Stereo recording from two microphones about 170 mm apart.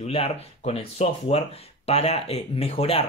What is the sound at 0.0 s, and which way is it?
Speech, 35° left (ahead or behind).